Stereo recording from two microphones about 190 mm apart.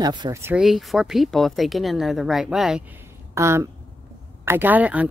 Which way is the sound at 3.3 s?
15° right (ahead or behind).